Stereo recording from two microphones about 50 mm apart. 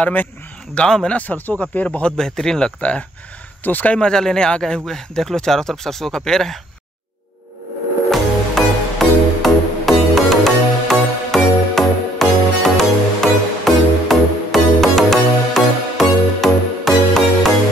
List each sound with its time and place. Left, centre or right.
0.0 s speech: left
0.8 s speech: centre
1.1 s speech: left
2.1 s speech: centre
2.8 s speech: left
3.9 s speech: centre
8.1 s music: centre